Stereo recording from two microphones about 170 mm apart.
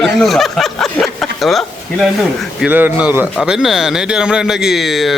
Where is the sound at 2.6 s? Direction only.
10° right (ahead or behind).